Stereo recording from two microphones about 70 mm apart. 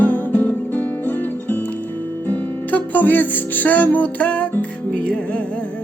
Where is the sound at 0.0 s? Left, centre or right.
Left.